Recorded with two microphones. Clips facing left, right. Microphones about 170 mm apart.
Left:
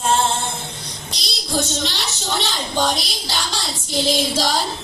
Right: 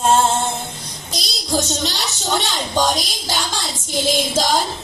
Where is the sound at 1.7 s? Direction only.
45° right (ahead or behind).